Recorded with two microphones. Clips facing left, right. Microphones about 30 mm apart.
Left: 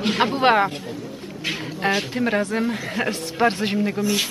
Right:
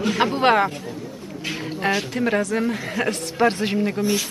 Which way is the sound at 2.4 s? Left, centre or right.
Left.